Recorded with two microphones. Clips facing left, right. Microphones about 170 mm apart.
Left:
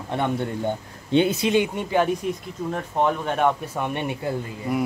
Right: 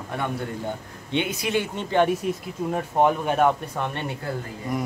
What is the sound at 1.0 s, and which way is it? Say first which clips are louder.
Speech: left 6 dB; 35° left (ahead or behind).